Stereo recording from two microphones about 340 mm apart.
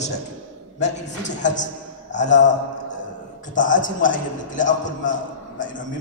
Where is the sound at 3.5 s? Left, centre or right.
Left.